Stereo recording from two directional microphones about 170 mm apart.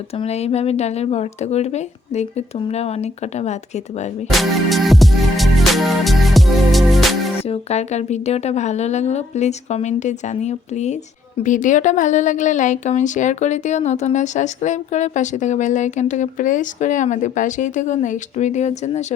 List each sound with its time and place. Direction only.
0.2 s a woman's voice: 40° left (ahead or behind)
4.3 s music: centre (ahead or behind)
7.4 s a woman's voice: 40° left (ahead or behind)